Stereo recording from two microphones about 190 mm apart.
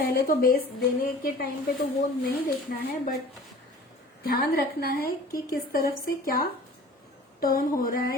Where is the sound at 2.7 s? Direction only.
55° left (ahead or behind).